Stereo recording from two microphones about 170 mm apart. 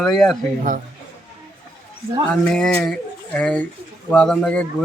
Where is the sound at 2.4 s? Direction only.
5° left (ahead or behind).